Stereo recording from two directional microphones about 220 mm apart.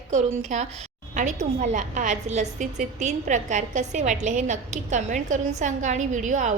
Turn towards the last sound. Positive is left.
turn(degrees=-35)  # may be behind; listen again after turning